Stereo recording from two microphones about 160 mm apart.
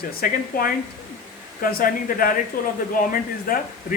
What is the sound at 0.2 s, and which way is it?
Speech, 65° left (ahead or behind).